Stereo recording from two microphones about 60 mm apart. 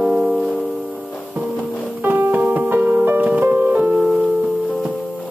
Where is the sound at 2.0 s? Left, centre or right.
Right.